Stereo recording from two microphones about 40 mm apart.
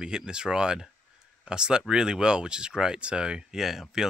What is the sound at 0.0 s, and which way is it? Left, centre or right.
Speech, centre.